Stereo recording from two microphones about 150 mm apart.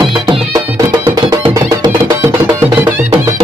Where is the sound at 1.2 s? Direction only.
25° right (ahead or behind).